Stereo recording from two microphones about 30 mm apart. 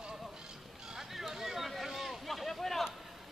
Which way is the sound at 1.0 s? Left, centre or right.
Centre.